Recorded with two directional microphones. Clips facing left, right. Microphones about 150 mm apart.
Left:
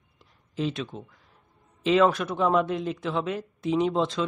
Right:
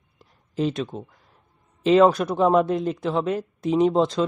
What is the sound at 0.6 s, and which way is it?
Speech, 40° right (ahead or behind).